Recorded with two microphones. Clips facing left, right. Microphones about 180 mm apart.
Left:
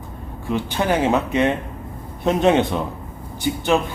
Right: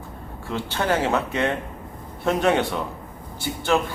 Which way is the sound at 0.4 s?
15° left (ahead or behind).